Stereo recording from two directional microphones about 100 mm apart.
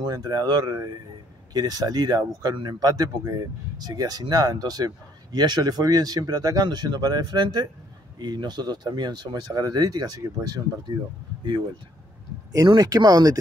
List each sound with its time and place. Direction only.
0.0 s speech: 45° right (ahead or behind)
12.5 s speech: 40° right (ahead or behind)